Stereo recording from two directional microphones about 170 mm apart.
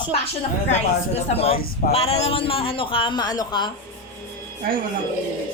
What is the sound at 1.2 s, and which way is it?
A man's voice, 35° left (ahead or behind).